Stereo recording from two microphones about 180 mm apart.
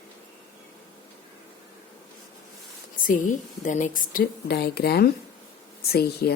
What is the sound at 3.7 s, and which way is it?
Speech, 45° left (ahead or behind).